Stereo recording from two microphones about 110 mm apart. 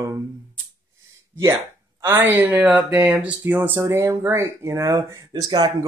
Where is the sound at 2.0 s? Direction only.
20° right (ahead or behind).